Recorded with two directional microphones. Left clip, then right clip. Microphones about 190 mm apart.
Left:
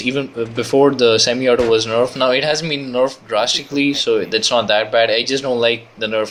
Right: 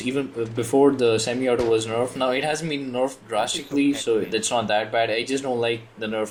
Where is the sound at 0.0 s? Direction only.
20° left (ahead or behind).